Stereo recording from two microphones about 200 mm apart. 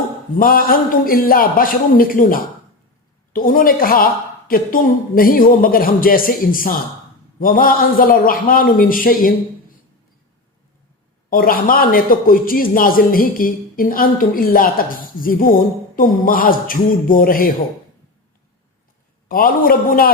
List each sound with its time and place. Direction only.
0.3 s a man's voice: 45° left (ahead or behind)
11.3 s a man's voice: 45° left (ahead or behind)
19.3 s a man's voice: 45° left (ahead or behind)